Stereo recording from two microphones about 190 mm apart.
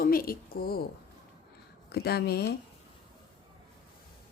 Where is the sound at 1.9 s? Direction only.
55° left (ahead or behind).